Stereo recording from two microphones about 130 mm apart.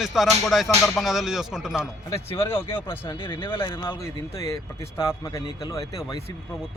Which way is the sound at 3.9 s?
20° left (ahead or behind).